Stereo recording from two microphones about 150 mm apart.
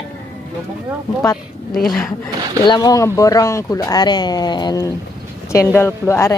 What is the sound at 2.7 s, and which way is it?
Speech, 25° left (ahead or behind).